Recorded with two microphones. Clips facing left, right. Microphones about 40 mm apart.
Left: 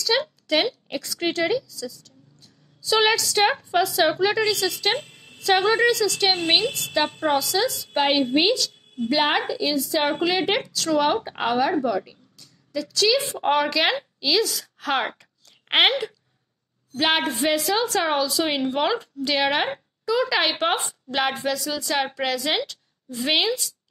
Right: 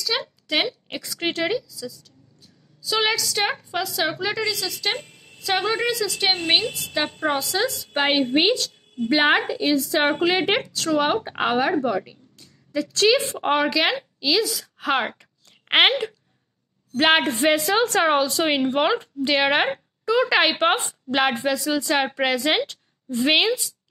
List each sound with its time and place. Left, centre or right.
0.0 s a sound: centre
0.9 s a woman's voice: centre
5.9 s a woman's voice: centre
7.3 s a woman's voice: right
9.6 s speech: right
10.2 s a woman's voice: centre
13.4 s a woman's voice: centre
13.7 s a woman's voice: centre
15.1 s a sound: centre
16.9 s a woman's voice: right; by 19.7 s centre
20.1 s a woman's voice: right